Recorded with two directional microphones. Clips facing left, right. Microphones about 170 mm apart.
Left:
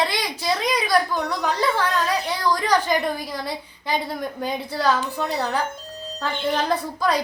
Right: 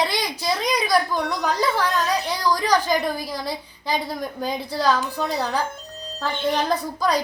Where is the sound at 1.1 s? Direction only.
10° right (ahead or behind).